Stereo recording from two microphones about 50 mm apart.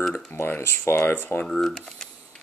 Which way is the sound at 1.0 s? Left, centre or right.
Left.